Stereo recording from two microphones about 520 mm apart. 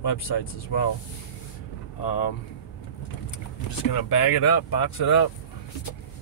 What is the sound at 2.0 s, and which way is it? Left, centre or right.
Speech, left.